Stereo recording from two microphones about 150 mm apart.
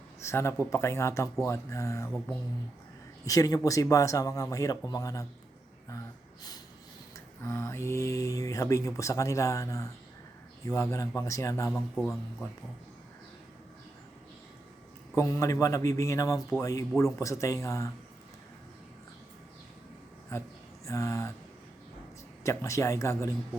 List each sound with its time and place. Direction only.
0.2 s speech: 15° left (ahead or behind)
2.0 s speech: 10° left (ahead or behind)
3.2 s speech: 25° left (ahead or behind)
7.4 s speech: 20° left (ahead or behind)
11.7 s a man's voice: 5° left (ahead or behind)
15.1 s speech: 20° left (ahead or behind)
20.8 s speech: 20° left (ahead or behind)
22.4 s speech: 20° left (ahead or behind)